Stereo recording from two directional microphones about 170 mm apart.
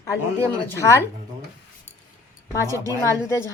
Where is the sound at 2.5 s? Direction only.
15° left (ahead or behind).